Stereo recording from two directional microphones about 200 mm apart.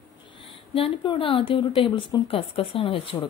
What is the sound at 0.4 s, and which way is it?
A woman's voice, 25° left (ahead or behind).